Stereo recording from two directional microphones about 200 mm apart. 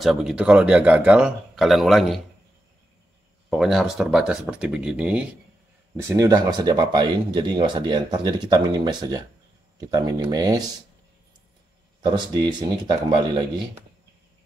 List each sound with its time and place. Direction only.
0.0 s speech: centre (ahead or behind)
3.4 s speech: centre (ahead or behind); by 10.6 s 20° right (ahead or behind)
12.0 s speech: 20° right (ahead or behind)